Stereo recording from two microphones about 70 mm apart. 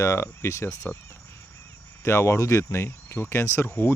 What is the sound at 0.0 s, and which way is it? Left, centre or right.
Speech, left.